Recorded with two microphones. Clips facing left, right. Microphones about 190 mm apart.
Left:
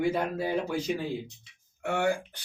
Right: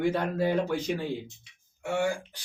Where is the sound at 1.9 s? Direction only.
60° left (ahead or behind).